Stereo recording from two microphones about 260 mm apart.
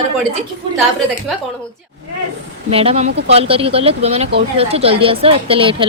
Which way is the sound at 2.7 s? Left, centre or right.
Right.